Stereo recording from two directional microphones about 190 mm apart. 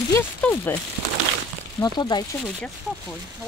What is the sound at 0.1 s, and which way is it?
Speech, 10° left (ahead or behind).